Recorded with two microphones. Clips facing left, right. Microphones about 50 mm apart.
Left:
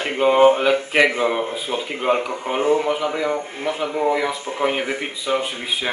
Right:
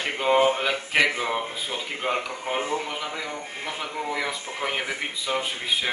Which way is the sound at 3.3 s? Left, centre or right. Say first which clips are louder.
Left 9 dB; left.